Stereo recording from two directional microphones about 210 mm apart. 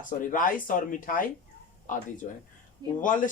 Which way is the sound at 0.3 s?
40° left (ahead or behind).